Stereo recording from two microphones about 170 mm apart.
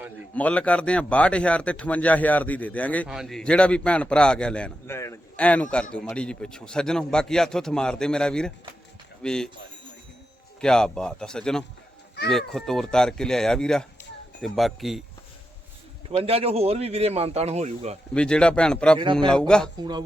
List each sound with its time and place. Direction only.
0.3 s a man's voice: 10° left (ahead or behind)
4.9 s a man's voice: 15° left (ahead or behind)
10.6 s a man's voice: 5° left (ahead or behind)
16.2 s speech: 35° right (ahead or behind)
18.1 s a man's voice: 5° left (ahead or behind)